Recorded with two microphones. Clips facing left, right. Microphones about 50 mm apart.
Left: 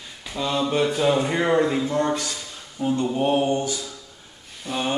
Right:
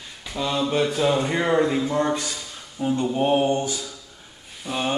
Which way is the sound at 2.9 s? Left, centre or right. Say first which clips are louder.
Right 1 dB; centre.